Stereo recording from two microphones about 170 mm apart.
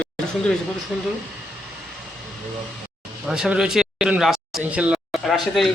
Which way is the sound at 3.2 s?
5° right (ahead or behind).